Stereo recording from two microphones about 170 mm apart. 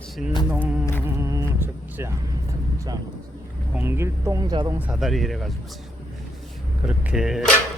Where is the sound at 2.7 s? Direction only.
20° right (ahead or behind).